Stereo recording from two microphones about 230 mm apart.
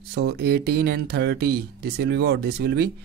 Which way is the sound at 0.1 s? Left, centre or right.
Right.